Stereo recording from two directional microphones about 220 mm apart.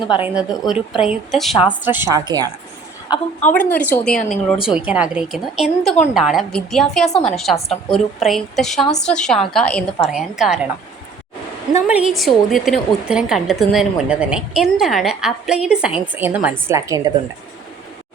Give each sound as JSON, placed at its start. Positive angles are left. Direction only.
{"t": 0.2, "sound": "a woman's voice", "side_deg": -5}
{"t": 3.5, "sound": "a woman's voice", "side_deg": 5}
{"t": 11.7, "sound": "a woman's voice", "side_deg": -5}